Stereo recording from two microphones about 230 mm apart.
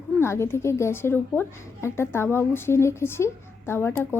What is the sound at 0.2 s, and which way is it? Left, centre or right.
A woman's voice, centre.